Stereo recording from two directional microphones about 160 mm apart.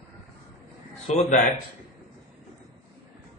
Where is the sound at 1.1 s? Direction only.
45° left (ahead or behind).